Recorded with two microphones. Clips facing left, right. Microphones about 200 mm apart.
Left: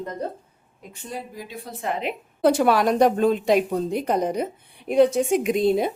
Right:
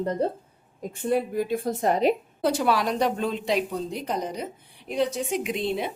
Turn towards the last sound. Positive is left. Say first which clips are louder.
# left 7 dB
turn(degrees=40)  # may be behind; listen again after turning